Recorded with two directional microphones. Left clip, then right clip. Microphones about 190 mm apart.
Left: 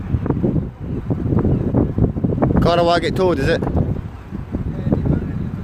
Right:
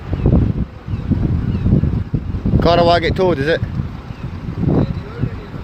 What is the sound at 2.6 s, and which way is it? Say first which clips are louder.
Speech: right 4 dB; 10° left (ahead or behind).